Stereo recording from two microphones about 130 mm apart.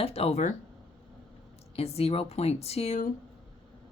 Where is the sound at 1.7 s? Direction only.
50° left (ahead or behind).